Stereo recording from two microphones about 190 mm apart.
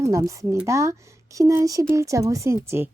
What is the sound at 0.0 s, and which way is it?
Speech, 15° right (ahead or behind).